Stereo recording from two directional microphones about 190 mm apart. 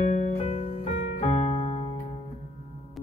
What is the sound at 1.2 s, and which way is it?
Keyboard, 35° left (ahead or behind).